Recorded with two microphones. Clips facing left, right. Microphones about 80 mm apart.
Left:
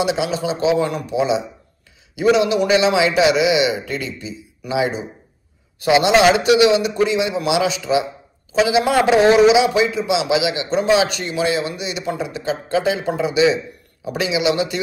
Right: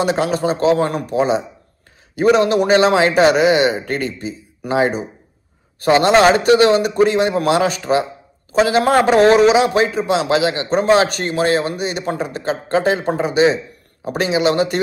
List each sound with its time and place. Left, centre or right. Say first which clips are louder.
0.0 s a man's voice: right 3 dB; right